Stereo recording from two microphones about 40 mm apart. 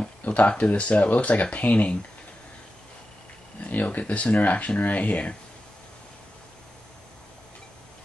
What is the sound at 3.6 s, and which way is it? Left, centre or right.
Speech, left.